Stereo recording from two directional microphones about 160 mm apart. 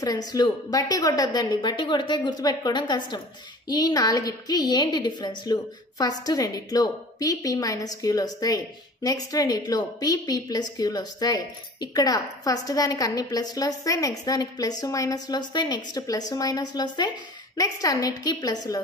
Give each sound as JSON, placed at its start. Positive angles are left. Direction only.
{"t": 0.0, "sound": "a woman's voice", "side_deg": 25}